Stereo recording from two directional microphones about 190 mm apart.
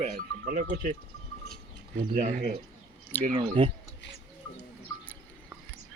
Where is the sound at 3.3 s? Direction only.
25° right (ahead or behind).